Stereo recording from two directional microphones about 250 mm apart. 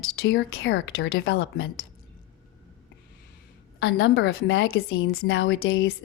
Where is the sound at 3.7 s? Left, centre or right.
Left.